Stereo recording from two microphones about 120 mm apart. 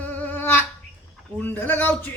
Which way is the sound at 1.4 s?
15° left (ahead or behind).